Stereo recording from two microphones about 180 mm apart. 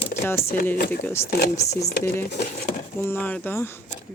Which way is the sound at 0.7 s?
60° left (ahead or behind).